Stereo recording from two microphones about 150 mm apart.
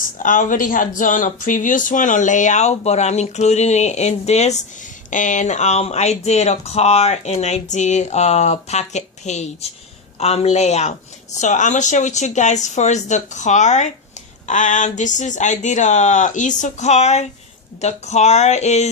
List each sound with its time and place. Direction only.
0.0 s speech: 60° left (ahead or behind)